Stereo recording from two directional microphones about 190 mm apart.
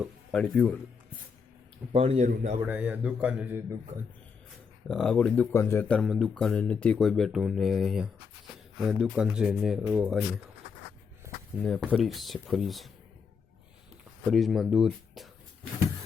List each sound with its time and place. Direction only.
0.0 s speech: 5° left (ahead or behind)
1.9 s a man's voice: 30° right (ahead or behind)
2.6 s speech: 10° right (ahead or behind)
4.9 s speech: 5° left (ahead or behind)
6.0 s speech: centre (ahead or behind)
11.6 s speech: centre (ahead or behind)
14.3 s speech: centre (ahead or behind)